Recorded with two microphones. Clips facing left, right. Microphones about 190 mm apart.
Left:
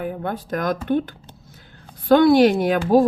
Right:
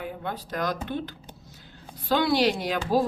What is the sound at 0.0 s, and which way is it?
A woman's voice, 50° left (ahead or behind).